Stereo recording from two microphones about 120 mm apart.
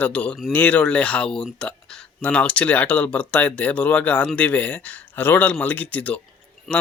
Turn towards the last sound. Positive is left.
turn(degrees=0)  # may be behind; listen again after turning